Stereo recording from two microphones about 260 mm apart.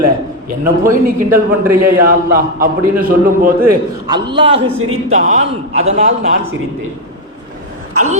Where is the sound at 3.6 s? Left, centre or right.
Centre.